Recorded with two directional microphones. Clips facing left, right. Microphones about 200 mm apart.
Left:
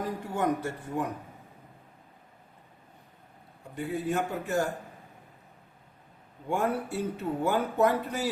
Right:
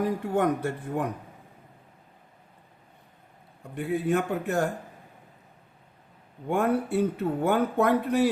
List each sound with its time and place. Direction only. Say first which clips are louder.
0.3 s speech: right 2 dB; 60° right (ahead or behind)
3.8 s speech: right 4 dB; 60° right (ahead or behind)
6.5 s speech: right 4 dB; 60° right (ahead or behind)